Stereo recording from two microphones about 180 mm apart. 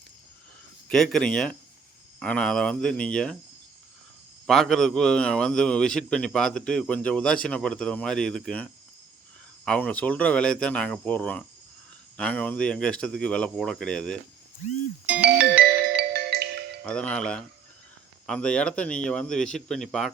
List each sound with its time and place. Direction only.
0.9 s a man's voice: 5° left (ahead or behind)
4.4 s a man's voice: centre (ahead or behind)
15.0 s music: 5° right (ahead or behind)
16.0 s music: 65° right (ahead or behind)
16.8 s a man's voice: 5° left (ahead or behind)